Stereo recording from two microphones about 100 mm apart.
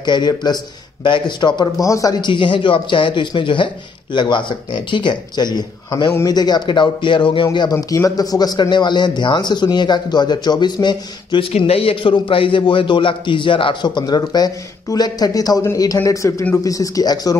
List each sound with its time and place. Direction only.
0.0 s a man's voice: 45° left (ahead or behind)
1.8 s speech: 35° left (ahead or behind)
2.2 s a man's voice: 55° left (ahead or behind)
7.9 s a man's voice: 35° left (ahead or behind)
11.5 s a man's voice: 75° left (ahead or behind); by 17.4 s 40° left (ahead or behind)